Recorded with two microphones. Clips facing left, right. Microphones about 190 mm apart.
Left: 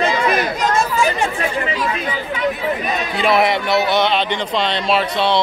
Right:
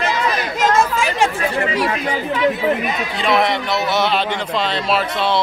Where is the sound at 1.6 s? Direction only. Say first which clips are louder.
Right 5 dB; 70° right (ahead or behind).